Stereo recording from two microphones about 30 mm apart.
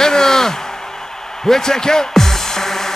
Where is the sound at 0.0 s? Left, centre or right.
Centre.